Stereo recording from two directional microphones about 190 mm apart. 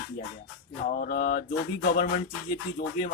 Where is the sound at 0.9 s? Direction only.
50° left (ahead or behind).